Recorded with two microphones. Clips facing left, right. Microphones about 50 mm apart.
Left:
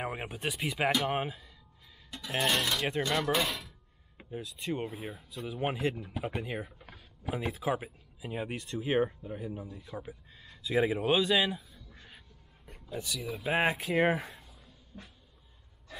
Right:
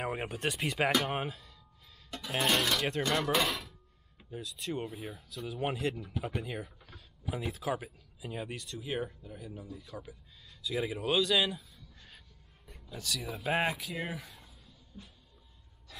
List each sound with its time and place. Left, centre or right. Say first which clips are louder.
0.1 s speech: right 2 dB; centre
2.4 s speech: right 1 dB; centre
3.3 s speech: right 1 dB; centre
4.2 s speech: left 2 dB; left
6.8 s speech: left 3 dB; left
11.9 s crow: left 4 dB; centre
12.9 s speech: left 1 dB; centre
13.2 s speech: left 1 dB; centre
13.6 s speech: left 5 dB; left
14.9 s vehicle: left 2 dB; left